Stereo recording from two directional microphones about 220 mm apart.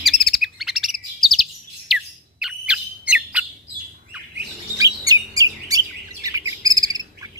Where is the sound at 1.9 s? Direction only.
Centre (ahead or behind).